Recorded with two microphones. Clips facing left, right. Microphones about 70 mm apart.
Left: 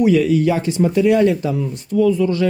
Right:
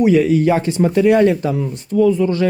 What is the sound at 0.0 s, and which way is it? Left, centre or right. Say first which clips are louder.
Speech: right 1 dB; right.